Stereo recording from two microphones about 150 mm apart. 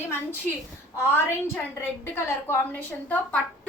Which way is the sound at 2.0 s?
15° left (ahead or behind).